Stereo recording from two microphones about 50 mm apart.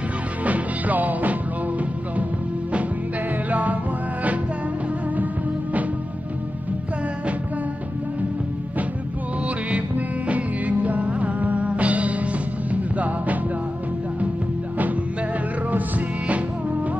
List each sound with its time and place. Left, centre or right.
0.4 s music: right
3.4 s music: right
5.1 s music: right
9.7 s music: right
16.3 s music: right